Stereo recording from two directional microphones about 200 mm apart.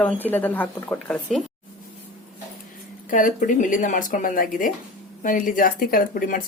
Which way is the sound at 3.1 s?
40° left (ahead or behind).